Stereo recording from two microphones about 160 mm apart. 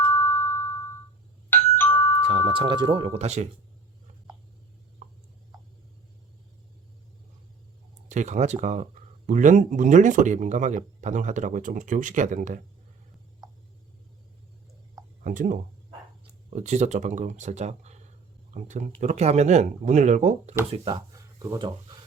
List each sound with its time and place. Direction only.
0.1 s ding: 15° left (ahead or behind)
1.7 s music: 10° left (ahead or behind)
2.2 s speech: 35° right (ahead or behind)
3.1 s speech: 45° right (ahead or behind)
8.1 s speech: 50° right (ahead or behind)
15.2 s speech: 55° right (ahead or behind)
20.7 s speech: 35° right (ahead or behind)